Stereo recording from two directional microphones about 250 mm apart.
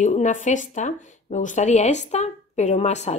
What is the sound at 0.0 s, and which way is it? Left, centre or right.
A woman's voice, left.